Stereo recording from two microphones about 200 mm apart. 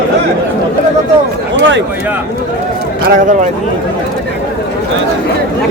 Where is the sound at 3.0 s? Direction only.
40° right (ahead or behind).